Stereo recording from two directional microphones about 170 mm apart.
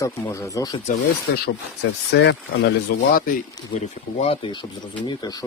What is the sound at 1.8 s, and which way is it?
Speech, 90° left.